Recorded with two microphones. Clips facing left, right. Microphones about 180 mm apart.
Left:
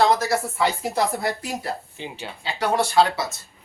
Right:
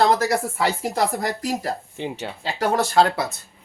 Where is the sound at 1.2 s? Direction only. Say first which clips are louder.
Right 2 dB; 40° right (ahead or behind).